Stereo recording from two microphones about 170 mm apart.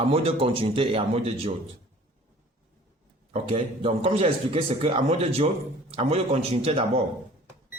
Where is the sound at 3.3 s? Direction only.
40° right (ahead or behind).